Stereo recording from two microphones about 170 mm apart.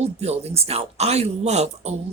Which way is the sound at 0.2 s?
40° right (ahead or behind).